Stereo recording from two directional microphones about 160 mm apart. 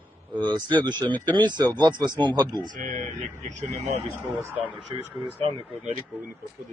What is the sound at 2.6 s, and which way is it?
Speech, 55° right (ahead or behind).